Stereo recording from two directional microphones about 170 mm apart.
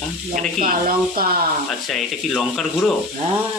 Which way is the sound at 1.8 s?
Centre (ahead or behind).